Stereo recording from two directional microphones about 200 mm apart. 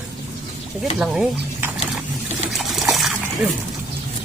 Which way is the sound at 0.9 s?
5° right (ahead or behind).